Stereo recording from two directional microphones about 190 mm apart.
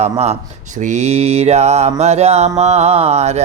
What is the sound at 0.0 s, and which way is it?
Mantra, 35° right (ahead or behind).